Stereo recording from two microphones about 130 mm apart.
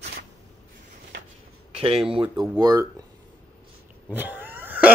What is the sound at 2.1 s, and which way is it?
Speech, 35° right (ahead or behind).